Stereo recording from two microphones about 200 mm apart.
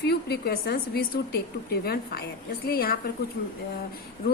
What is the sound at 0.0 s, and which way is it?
A woman's voice, 55° left (ahead or behind).